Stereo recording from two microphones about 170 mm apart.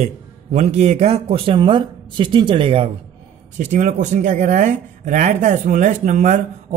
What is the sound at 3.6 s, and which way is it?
Speech, 45° right (ahead or behind).